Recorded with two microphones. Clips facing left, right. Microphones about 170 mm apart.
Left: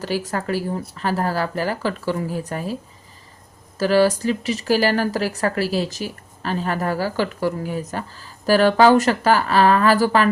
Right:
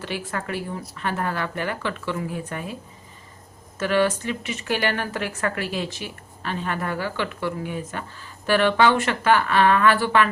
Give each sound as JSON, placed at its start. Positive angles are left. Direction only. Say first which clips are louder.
{"t": 0.0, "sound": "speech", "louder": "left 5 dB", "side_deg": 40}
{"t": 3.8, "sound": "speech", "louder": "left 5 dB", "side_deg": 35}